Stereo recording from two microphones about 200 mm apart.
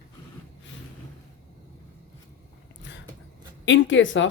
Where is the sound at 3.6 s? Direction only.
70° left (ahead or behind).